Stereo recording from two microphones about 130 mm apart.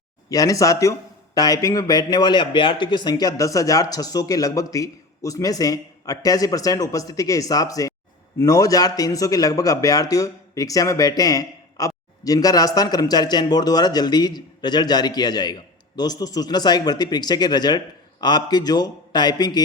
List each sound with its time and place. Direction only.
0.3 s speech: 25° left (ahead or behind)